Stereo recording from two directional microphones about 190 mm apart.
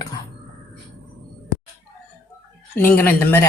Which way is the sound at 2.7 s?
10° left (ahead or behind).